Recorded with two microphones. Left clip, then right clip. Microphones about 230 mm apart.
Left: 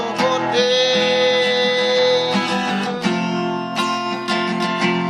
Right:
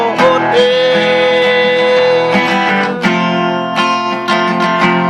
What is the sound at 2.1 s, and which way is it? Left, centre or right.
Music, right.